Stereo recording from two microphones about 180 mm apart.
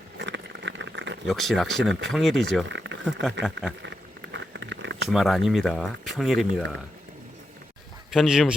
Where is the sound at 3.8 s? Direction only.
80° right.